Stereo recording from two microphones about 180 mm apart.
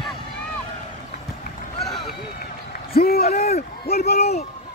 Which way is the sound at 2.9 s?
60° left (ahead or behind).